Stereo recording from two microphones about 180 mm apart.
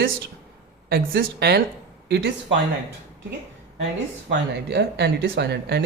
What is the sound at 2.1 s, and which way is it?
Speech, 75° right (ahead or behind).